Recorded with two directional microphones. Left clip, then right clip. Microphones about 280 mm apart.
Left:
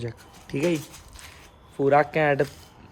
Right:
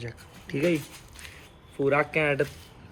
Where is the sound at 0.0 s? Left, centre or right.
Left.